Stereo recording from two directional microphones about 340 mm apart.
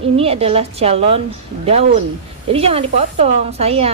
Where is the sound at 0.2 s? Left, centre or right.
Centre.